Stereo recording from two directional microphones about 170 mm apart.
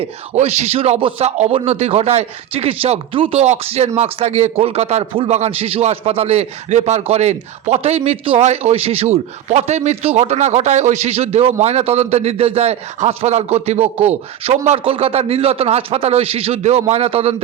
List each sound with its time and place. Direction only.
0.0 s speech: 40° right (ahead or behind)